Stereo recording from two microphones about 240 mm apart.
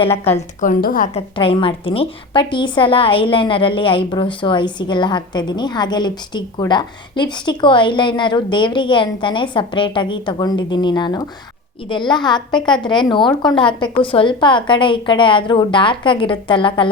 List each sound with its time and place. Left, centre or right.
0.6 s a woman's voice: left
1.4 s a woman's voice: left